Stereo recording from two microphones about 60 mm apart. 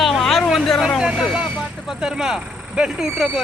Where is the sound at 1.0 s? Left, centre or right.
Centre.